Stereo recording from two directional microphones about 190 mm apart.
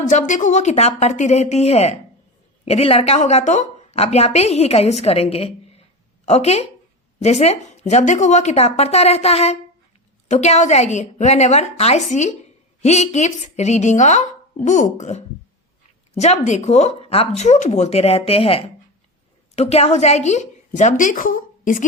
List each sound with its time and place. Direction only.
0.0 s a woman's voice: 40° left (ahead or behind)